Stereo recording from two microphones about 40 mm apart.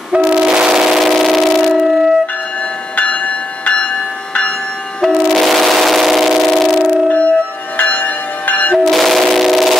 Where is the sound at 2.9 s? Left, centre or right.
Left.